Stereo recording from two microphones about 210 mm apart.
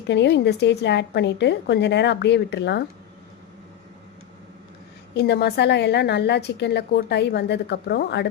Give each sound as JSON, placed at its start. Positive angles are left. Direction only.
{"t": 0.1, "sound": "a woman's voice", "side_deg": 55}
{"t": 5.1, "sound": "a woman's voice", "side_deg": 50}